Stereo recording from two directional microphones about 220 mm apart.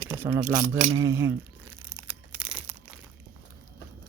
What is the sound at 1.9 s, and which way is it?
Crumpling, 5° right (ahead or behind).